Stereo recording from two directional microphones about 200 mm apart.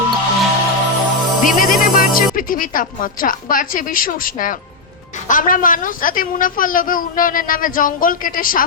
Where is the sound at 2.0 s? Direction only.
45° left (ahead or behind).